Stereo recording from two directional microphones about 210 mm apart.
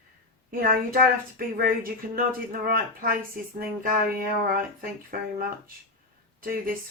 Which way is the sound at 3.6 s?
40° right (ahead or behind).